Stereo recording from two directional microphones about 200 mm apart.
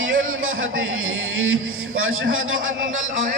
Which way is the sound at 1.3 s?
90° right.